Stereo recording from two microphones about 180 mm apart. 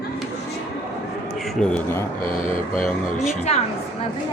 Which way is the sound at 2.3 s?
50° left (ahead or behind).